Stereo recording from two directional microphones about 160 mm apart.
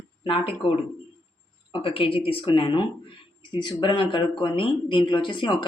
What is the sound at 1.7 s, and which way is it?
Speech, 35° left (ahead or behind).